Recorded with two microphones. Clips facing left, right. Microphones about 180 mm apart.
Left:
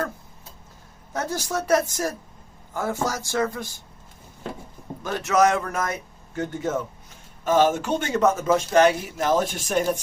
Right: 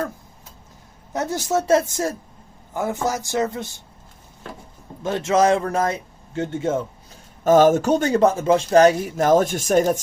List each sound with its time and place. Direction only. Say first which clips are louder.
1.1 s a woman's voice: right 5 dB; 20° right (ahead or behind)
5.0 s a man's voice: right 3 dB; 25° right (ahead or behind)
7.4 s speech: right 6 dB; 45° right (ahead or behind)